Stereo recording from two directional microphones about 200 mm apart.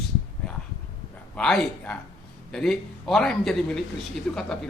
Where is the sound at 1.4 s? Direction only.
5° left (ahead or behind).